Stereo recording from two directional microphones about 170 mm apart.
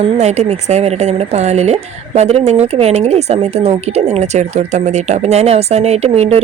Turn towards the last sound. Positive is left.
turn(degrees=-40)  # may be behind; listen again after turning